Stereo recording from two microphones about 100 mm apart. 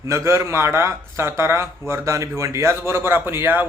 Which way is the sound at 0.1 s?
25° right (ahead or behind).